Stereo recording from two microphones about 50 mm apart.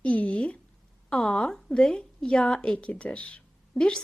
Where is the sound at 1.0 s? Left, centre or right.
Centre.